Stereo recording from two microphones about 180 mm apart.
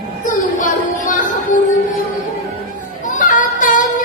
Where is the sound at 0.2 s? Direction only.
45° left (ahead or behind).